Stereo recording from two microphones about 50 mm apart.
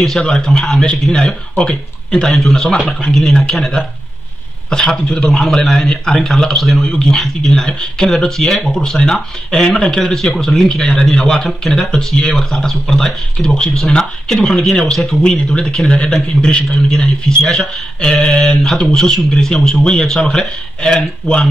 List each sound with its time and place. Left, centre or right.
0.2 s speech: centre
17.4 s speech: centre
18.8 s speech: centre